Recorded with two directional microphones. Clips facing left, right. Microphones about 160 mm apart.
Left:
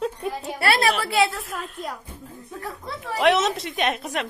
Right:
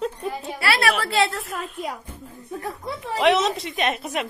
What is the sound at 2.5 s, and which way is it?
Speech, 20° right (ahead or behind).